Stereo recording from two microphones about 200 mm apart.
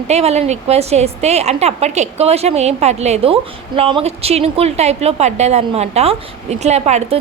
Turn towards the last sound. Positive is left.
turn(degrees=-35)  # may be behind; listen again after turning